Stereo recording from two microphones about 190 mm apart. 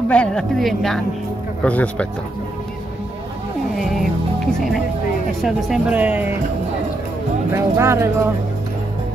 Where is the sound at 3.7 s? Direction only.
Centre (ahead or behind).